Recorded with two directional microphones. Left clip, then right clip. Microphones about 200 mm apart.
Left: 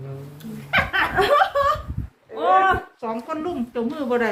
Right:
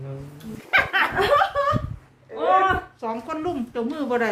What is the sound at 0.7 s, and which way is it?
Speech, 10° right (ahead or behind).